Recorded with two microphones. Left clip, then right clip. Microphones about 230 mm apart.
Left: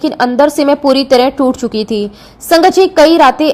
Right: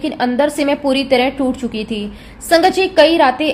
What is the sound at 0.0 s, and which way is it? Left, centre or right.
A woman's voice, left.